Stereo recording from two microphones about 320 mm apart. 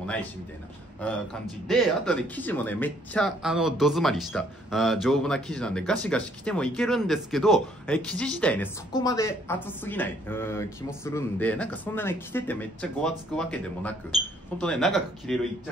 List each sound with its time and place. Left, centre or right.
0.0 s a man's voice: centre
1.7 s speech: centre